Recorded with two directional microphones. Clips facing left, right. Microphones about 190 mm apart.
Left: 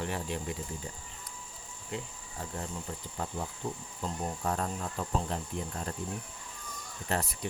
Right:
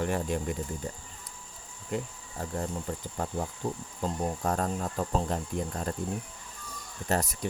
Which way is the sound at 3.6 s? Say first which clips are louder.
Right 3 dB; 40° right (ahead or behind).